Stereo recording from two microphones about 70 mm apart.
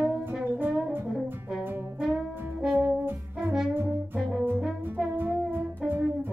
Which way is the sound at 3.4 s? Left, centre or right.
Centre.